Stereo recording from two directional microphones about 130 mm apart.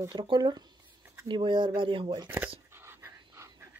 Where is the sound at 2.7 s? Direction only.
20° right (ahead or behind).